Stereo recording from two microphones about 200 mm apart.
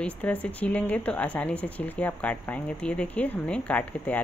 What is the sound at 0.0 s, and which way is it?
Speech, 5° left (ahead or behind).